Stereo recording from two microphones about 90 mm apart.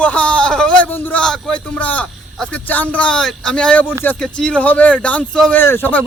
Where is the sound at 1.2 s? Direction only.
5° left (ahead or behind).